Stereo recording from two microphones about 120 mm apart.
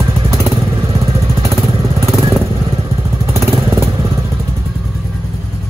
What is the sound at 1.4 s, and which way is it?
Vehicle, 25° right (ahead or behind).